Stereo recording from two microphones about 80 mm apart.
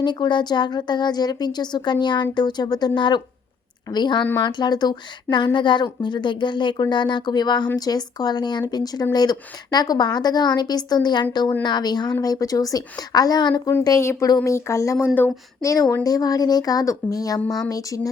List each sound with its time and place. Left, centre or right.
0.0 s a woman's voice: left
5.5 s a woman's voice: left
14.0 s speech: left